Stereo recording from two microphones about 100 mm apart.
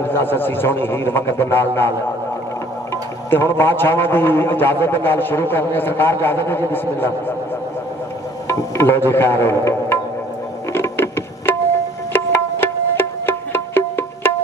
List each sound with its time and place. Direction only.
0.1 s a man's voice: 20° left (ahead or behind)
8.5 s speech: 25° left (ahead or behind)
10.7 s music: 25° left (ahead or behind)